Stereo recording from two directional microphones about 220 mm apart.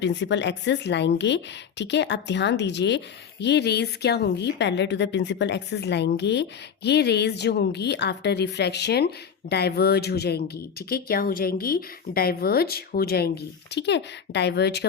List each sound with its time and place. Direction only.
0.0 s speech: 55° left (ahead or behind)